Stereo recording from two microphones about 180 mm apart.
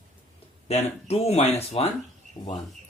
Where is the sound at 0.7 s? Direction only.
35° left (ahead or behind).